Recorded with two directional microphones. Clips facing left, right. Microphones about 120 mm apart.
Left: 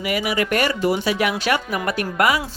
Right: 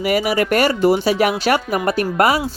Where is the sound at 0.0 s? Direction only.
40° right (ahead or behind).